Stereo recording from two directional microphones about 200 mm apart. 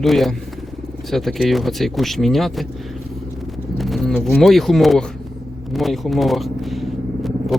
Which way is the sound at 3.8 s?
Centre (ahead or behind).